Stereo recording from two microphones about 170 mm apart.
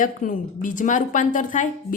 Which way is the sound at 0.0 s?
50° left (ahead or behind).